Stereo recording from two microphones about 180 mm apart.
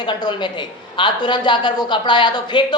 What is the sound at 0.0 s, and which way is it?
A man's voice, 25° left (ahead or behind).